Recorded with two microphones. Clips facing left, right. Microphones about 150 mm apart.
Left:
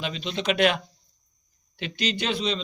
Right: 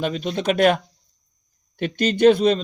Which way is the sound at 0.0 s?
50° right (ahead or behind).